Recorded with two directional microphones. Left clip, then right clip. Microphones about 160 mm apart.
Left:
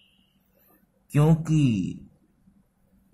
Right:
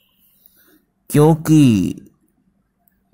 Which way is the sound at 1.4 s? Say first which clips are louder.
Right 13 dB; 40° right (ahead or behind).